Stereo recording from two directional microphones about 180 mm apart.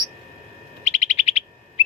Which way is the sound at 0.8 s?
45° left (ahead or behind).